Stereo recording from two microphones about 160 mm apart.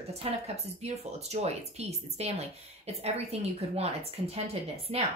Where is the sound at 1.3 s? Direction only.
40° right (ahead or behind).